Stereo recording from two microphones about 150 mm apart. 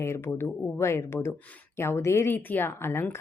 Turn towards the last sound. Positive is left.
turn(degrees=15)  # may be behind; listen again after turning